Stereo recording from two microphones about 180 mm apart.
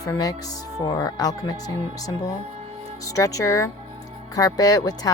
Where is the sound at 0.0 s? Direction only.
20° left (ahead or behind).